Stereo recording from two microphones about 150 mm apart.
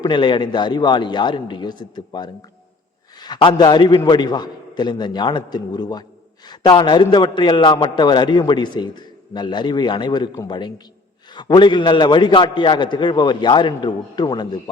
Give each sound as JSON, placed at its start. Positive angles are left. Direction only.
{"t": 0.0, "sound": "a man's voice", "side_deg": 30}
{"t": 3.2, "sound": "a man's voice", "side_deg": 30}